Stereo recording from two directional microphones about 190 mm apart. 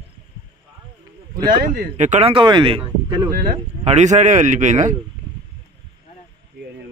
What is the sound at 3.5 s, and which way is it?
Speech, 35° right (ahead or behind).